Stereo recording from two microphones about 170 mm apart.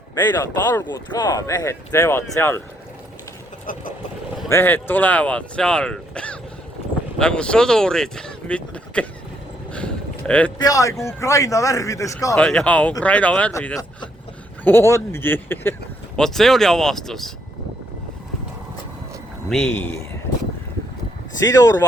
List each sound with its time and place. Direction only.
0.2 s speech: 25° left (ahead or behind)
4.4 s speech: 15° left (ahead or behind)
9.7 s a sound: 5° left (ahead or behind)
10.6 s speech: 20° left (ahead or behind)
12.4 s speech: 5° left (ahead or behind)
19.5 s speech: 5° left (ahead or behind)
21.4 s speech: 20° left (ahead or behind)